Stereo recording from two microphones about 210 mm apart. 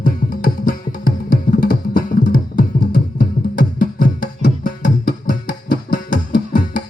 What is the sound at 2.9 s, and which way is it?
Music, 45° left (ahead or behind).